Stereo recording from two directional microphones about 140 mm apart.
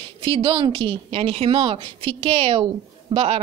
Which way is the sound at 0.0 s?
40° right (ahead or behind).